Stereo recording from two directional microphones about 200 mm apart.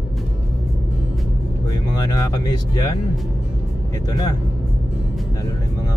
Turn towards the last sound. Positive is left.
turn(degrees=20)  # may be behind; listen again after turning